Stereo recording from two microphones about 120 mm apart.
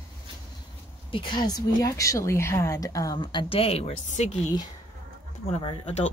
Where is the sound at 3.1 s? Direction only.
40° left (ahead or behind); by 4.2 s 70° left (ahead or behind).